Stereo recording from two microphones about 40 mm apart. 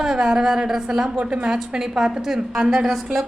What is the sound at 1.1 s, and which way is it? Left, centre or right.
Speech, right.